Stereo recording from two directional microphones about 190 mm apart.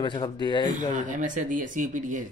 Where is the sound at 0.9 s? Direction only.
40° right (ahead or behind).